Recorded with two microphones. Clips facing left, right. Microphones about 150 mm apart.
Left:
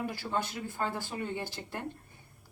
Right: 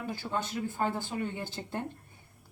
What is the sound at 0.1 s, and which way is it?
Speech, 20° right (ahead or behind).